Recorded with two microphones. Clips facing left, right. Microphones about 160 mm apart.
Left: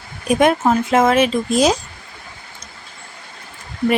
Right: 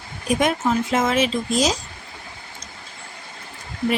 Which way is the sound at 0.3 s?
60° left (ahead or behind).